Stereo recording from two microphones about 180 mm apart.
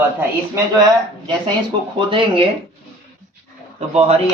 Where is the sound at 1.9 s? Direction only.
30° right (ahead or behind).